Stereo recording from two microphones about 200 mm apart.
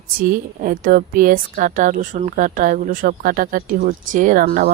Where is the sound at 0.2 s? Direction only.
45° right (ahead or behind).